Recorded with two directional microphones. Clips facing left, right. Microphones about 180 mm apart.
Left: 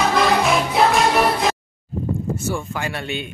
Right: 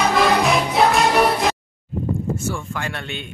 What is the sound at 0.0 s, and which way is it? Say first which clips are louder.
Music: even; centre (ahead or behind).